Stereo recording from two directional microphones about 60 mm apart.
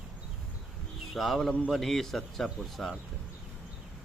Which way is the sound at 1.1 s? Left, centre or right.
Centre.